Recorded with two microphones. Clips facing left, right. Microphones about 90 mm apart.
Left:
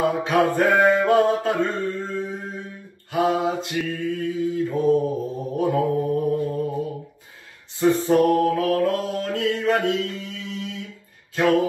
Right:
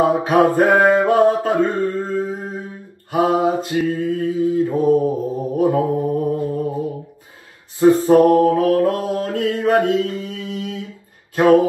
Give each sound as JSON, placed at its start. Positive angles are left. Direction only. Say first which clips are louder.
{"t": 0.0, "sound": "music", "louder": "right 5 dB", "side_deg": -30}
{"t": 0.8, "sound": "mantra", "louder": "right 4 dB", "side_deg": -30}
{"t": 1.8, "sound": "a sound", "louder": "right 6 dB", "side_deg": -45}
{"t": 3.1, "sound": "mantra", "louder": "right 5 dB", "side_deg": -35}
{"t": 4.0, "sound": "mantra", "louder": "right 5 dB", "side_deg": -35}
{"t": 4.8, "sound": "mantra", "louder": "right 2 dB", "side_deg": -10}
{"t": 5.6, "sound": "mantra", "louder": "right 4 dB", "side_deg": -25}
{"t": 7.8, "sound": "mantra", "louder": "right 6 dB", "side_deg": -25}